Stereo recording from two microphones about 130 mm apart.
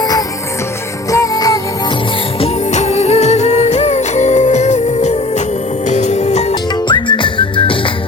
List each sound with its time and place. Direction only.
1.1 s music: 25° left (ahead or behind)
2.4 s music: 60° left (ahead or behind)
6.5 s music: 35° left (ahead or behind)